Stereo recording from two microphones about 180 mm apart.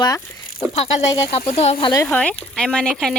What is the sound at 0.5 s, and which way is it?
Speech, 35° left (ahead or behind).